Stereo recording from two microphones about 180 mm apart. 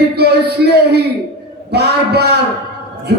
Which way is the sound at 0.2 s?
65° right (ahead or behind).